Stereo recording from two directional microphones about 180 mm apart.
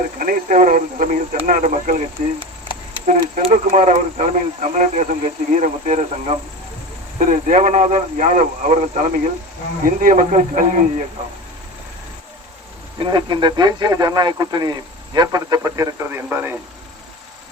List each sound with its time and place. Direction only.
0.2 s a man's voice: 50° right (ahead or behind)
13.0 s speech: 25° right (ahead or behind)